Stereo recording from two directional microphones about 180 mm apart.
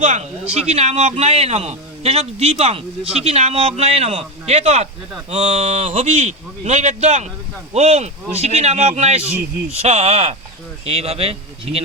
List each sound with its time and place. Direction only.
0.0 s a man's voice: 40° right (ahead or behind)